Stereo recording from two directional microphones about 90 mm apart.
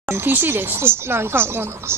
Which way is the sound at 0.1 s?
25° right (ahead or behind).